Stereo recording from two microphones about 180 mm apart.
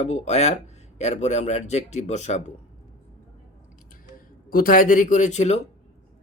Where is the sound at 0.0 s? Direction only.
40° left (ahead or behind).